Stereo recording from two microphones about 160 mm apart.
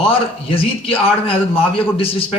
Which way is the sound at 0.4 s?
35° left (ahead or behind).